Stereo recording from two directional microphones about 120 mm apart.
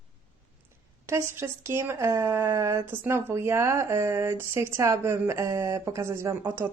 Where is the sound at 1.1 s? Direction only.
20° right (ahead or behind).